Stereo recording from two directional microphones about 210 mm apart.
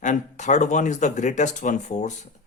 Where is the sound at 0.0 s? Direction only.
35° left (ahead or behind).